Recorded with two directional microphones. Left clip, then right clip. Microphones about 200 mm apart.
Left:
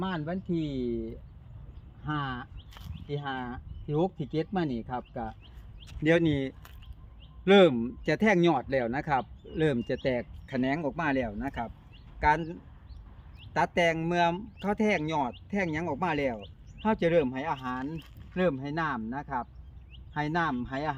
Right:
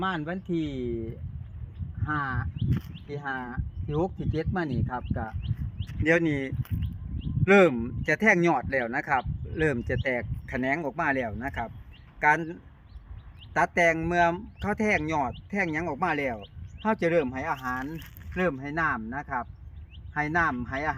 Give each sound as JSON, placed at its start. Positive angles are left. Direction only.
{"t": 0.0, "sound": "speech", "side_deg": -35}
{"t": 2.0, "sound": "speech", "side_deg": -5}